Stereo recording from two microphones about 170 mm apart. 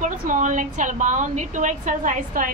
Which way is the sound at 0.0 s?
50° right (ahead or behind).